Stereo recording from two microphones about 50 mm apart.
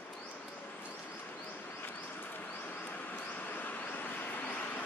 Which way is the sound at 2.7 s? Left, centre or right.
Left.